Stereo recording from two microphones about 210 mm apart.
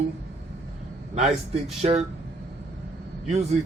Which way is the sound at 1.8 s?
30° right (ahead or behind).